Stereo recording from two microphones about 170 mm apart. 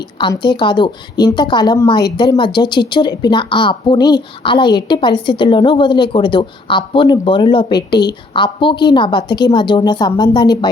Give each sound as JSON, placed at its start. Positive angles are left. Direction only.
{"t": 0.2, "sound": "a woman's voice", "side_deg": 25}